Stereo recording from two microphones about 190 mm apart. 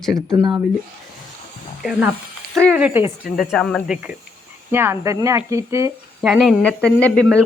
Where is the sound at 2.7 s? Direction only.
10° right (ahead or behind).